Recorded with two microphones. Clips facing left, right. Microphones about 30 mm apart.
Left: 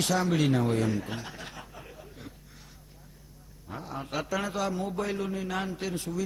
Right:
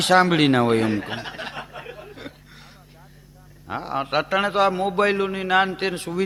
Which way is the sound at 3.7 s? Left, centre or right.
Right.